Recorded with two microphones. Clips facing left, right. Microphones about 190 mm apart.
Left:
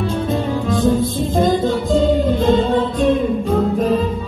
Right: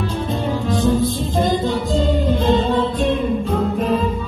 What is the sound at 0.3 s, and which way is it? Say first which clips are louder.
Music: even; 50° left (ahead or behind).